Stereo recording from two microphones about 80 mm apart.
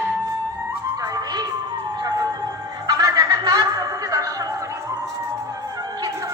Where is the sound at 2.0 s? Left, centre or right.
Right.